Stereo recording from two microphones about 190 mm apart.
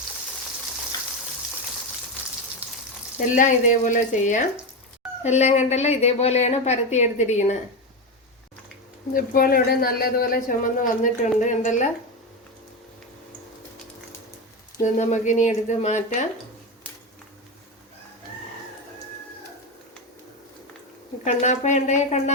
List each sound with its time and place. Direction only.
2.6 s frying: 10° right (ahead or behind)
3.2 s a woman's voice: 40° left (ahead or behind)
9.1 s a man's voice: 50° left (ahead or behind)
14.8 s a woman's voice: 40° left (ahead or behind)
21.2 s a woman's voice: 40° left (ahead or behind)